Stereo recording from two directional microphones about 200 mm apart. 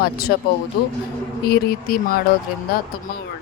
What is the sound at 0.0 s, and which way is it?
Speech, 50° left (ahead or behind).